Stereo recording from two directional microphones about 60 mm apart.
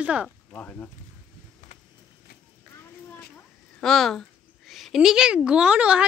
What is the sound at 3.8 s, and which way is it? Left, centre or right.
Speech, centre.